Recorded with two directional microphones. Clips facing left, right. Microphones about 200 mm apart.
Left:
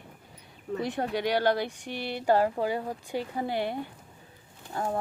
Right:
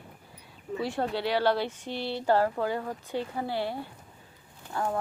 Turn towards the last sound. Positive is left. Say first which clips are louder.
# right 1 dB
turn(degrees=20)  # may be behind; listen again after turning